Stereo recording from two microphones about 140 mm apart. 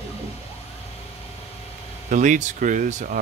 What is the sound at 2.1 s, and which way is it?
Speech, 65° right (ahead or behind).